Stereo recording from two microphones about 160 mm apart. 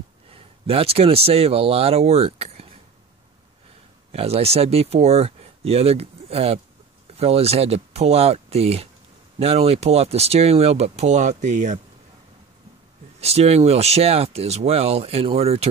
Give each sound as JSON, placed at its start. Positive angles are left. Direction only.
{"t": 0.3, "sound": "speech", "side_deg": -40}
{"t": 4.1, "sound": "speech", "side_deg": -40}
{"t": 13.2, "sound": "speech", "side_deg": -40}